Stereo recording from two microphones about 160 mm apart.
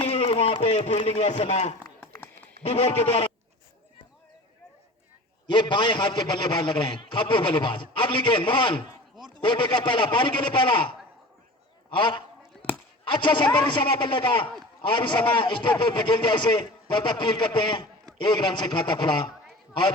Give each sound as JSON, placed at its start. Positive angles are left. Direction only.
{"t": 0.1, "sound": "speech", "side_deg": 35}
{"t": 5.5, "sound": "a man's voice", "side_deg": 30}
{"t": 11.9, "sound": "a man's voice", "side_deg": 30}
{"t": 12.5, "sound": "chop", "side_deg": 5}
{"t": 13.1, "sound": "a man's voice", "side_deg": 30}